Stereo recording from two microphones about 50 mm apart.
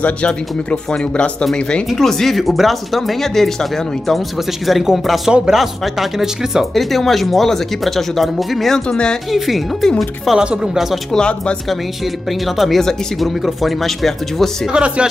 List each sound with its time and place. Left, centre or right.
0.0 s speech: left; by 6.7 s centre
6.7 s speech: centre
8.7 s speech: centre
9.3 s speech: centre
10.4 s a woman's voice: centre
11.1 s speech: left
12.3 s speech: centre
14.7 s speech: right